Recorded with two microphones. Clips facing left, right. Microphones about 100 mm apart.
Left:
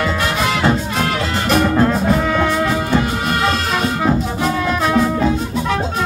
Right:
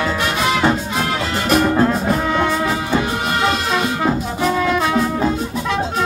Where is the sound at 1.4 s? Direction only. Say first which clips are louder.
Even; 10° right (ahead or behind).